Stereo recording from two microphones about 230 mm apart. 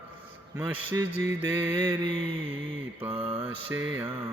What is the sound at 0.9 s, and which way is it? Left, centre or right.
Speech, centre.